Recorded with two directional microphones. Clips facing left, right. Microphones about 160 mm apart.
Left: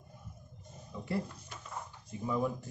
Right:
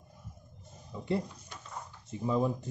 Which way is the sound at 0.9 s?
20° right (ahead or behind).